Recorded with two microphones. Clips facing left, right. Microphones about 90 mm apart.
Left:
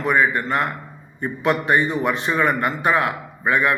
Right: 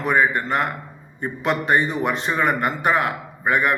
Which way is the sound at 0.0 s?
20° right (ahead or behind).